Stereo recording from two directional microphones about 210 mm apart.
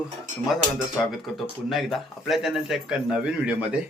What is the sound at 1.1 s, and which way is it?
Speech, centre (ahead or behind).